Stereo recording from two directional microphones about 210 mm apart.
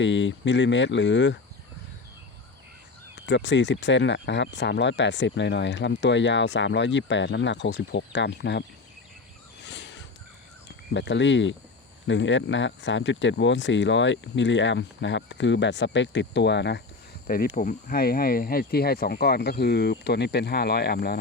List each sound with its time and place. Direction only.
0.0 s speech: 60° left (ahead or behind)
3.2 s speech: 55° left (ahead or behind)
9.6 s a sound: 55° left (ahead or behind)
10.9 s speech: 60° left (ahead or behind)
17.2 s speech: 45° left (ahead or behind)